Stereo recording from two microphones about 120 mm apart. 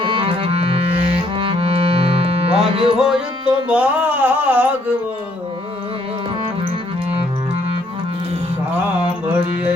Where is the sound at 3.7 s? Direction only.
10° right (ahead or behind).